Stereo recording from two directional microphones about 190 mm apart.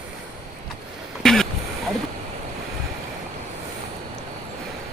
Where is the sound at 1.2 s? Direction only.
Centre (ahead or behind).